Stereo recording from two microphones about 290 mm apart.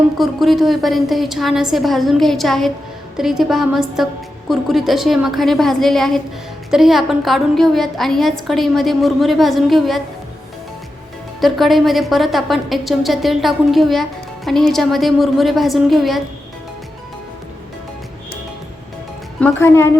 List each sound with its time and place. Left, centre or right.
0.2 s a woman's voice: centre
11.3 s a woman's voice: centre
19.4 s a woman's voice: centre